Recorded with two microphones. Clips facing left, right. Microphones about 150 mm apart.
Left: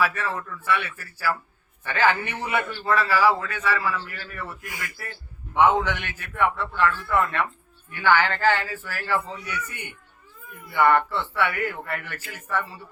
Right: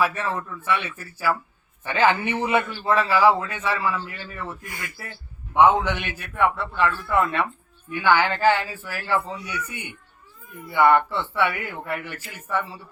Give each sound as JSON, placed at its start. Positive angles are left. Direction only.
{"t": 0.0, "sound": "a man's voice", "side_deg": -20}